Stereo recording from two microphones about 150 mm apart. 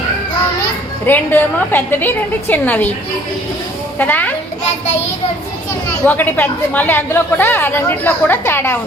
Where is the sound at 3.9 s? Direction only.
10° left (ahead or behind).